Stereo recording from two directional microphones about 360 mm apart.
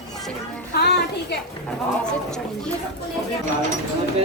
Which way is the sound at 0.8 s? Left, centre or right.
Left.